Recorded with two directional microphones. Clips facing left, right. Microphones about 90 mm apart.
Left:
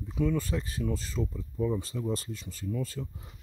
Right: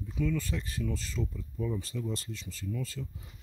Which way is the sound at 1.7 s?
35° left (ahead or behind).